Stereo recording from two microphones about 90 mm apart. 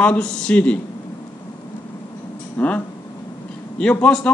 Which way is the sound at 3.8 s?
15° left (ahead or behind).